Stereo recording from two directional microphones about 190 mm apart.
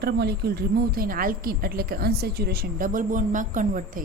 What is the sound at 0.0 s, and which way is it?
A woman's voice, 60° right (ahead or behind).